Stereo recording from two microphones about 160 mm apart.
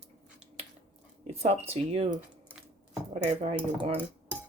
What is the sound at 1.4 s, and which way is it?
Speech, 40° right (ahead or behind).